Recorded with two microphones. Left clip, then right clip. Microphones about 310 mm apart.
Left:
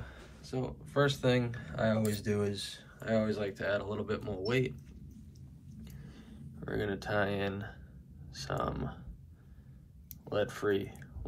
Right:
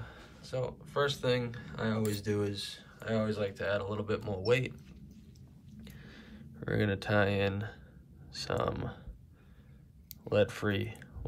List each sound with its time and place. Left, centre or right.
0.5 s speech: centre
5.9 s a sound: right
6.7 s speech: right
10.3 s speech: right